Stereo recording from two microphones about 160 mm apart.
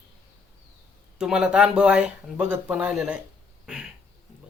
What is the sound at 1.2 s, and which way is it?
Speech, 5° right (ahead or behind).